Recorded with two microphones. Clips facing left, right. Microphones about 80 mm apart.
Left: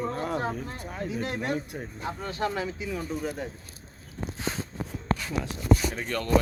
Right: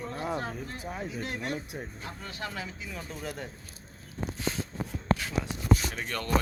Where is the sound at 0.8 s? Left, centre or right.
Centre.